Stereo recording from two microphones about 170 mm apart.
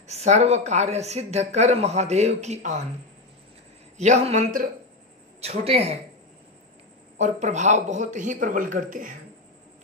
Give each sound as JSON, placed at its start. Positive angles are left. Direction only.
{"t": 0.0, "sound": "speech", "side_deg": -40}
{"t": 4.0, "sound": "a man's voice", "side_deg": -45}
{"t": 5.4, "sound": "speech", "side_deg": -35}
{"t": 7.2, "sound": "a man's voice", "side_deg": -45}